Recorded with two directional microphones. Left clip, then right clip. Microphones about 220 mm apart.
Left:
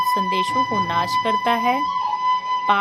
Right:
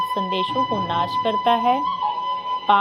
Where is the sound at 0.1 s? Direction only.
15° left (ahead or behind).